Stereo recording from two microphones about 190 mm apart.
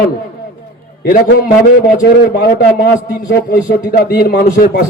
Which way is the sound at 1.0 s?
45° left (ahead or behind).